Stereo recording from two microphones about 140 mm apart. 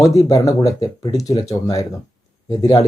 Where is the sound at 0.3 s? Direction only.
25° left (ahead or behind).